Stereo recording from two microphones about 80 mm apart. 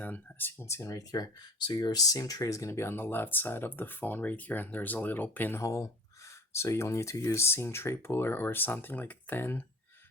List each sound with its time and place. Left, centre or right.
0.0 s a sound: left
0.6 s speech: left
1.2 s speech: left
1.7 s speech: left
5.5 s speech: left